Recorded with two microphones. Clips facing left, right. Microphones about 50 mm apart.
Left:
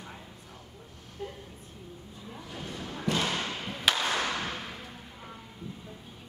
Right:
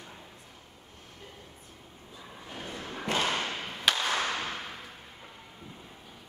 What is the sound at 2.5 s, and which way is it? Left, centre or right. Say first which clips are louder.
Thump: even; right.